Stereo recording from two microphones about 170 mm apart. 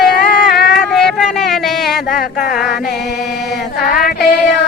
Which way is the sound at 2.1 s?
60° left (ahead or behind).